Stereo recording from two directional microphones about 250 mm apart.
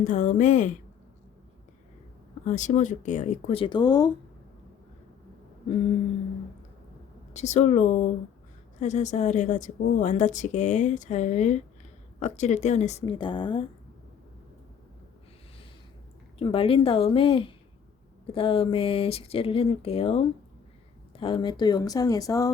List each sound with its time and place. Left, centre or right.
0.0 s speech: left
2.4 s a woman's voice: left
7.3 s a woman's voice: left
16.4 s a woman's voice: left